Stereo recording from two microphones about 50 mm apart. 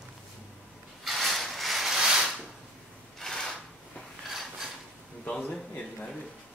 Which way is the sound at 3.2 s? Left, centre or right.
Centre.